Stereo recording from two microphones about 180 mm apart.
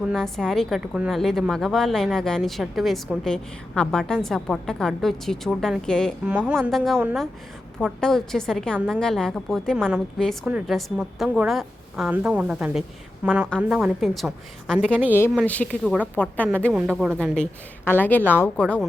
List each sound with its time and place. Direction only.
0.0 s a woman's voice: centre (ahead or behind)
16.7 s a woman's voice: 5° right (ahead or behind)
17.2 s a woman's voice: 5° left (ahead or behind)